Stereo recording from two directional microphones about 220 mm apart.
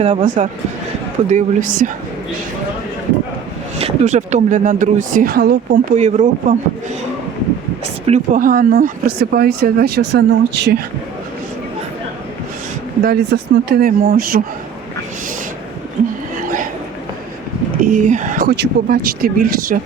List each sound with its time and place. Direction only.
0.0 s speech: 30° right (ahead or behind)
3.8 s speech: 30° right (ahead or behind); by 5.9 s 45° right (ahead or behind)
6.0 s speech: 30° right (ahead or behind)
8.0 s speech: 35° right (ahead or behind)
13.0 s speech: 45° right (ahead or behind)
16.0 s speech: 35° right (ahead or behind)
16.4 s a sound: 40° right (ahead or behind)
17.9 s speech: 35° right (ahead or behind)